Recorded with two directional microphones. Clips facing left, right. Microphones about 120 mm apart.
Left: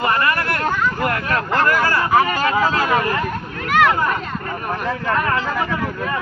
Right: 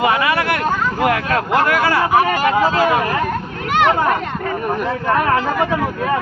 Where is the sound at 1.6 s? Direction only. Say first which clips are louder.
Right 2 dB; 75° right (ahead or behind).